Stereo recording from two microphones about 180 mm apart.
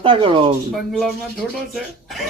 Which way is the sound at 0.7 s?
Centre (ahead or behind).